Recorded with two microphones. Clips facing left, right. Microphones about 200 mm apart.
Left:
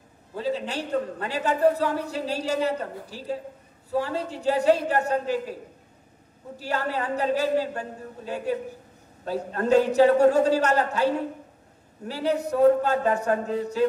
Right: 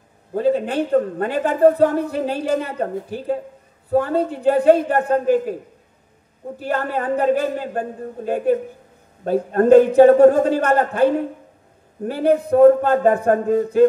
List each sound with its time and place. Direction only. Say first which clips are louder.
0.3 s a woman's voice: right 9 dB; 55° right (ahead or behind)